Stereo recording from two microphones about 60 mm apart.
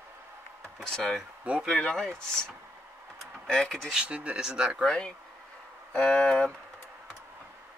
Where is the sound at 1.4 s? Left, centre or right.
Right.